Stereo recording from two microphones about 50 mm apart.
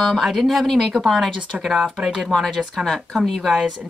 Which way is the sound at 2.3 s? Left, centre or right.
Centre.